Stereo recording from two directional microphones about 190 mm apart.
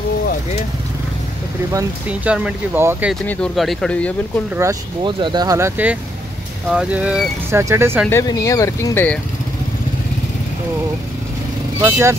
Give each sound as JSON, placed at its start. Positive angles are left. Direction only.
{"t": 1.7, "sound": "speech", "side_deg": -10}
{"t": 3.3, "sound": "speech", "side_deg": 5}
{"t": 4.6, "sound": "speech", "side_deg": -20}
{"t": 8.1, "sound": "speech", "side_deg": 20}
{"t": 11.8, "sound": "speech", "side_deg": -15}